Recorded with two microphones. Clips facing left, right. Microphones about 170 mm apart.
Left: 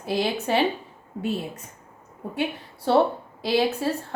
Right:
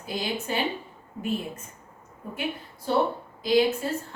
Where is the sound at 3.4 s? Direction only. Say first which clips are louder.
Right 1 dB; 70° left (ahead or behind).